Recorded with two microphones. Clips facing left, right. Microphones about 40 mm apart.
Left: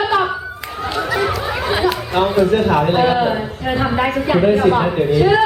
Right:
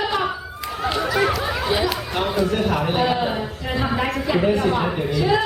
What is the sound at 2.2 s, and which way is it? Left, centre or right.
A man's voice, centre.